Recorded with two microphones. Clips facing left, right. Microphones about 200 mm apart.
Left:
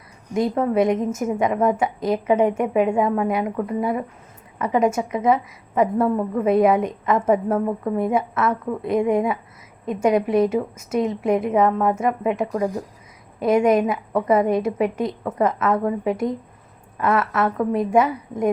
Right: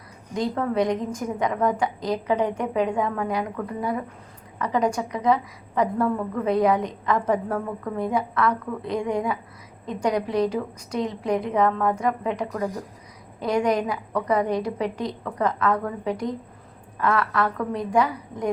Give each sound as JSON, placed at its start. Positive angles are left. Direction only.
{"t": 0.3, "sound": "a woman's voice", "side_deg": 20}